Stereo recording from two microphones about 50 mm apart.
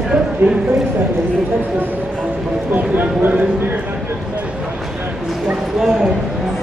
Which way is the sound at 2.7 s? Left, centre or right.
Right.